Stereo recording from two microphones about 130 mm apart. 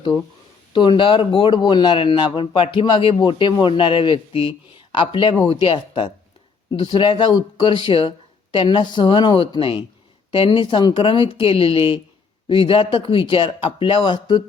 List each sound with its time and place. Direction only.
0.7 s speech: 40° left (ahead or behind)